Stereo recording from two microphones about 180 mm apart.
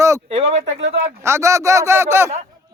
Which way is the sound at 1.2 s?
15° right (ahead or behind).